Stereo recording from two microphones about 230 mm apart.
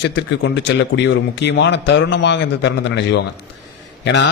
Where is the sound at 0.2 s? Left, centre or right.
Left.